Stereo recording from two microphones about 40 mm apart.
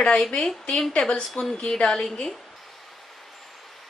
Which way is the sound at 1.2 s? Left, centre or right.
Centre.